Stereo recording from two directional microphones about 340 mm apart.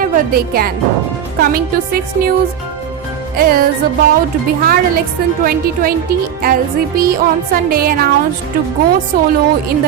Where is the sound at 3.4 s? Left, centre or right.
Right.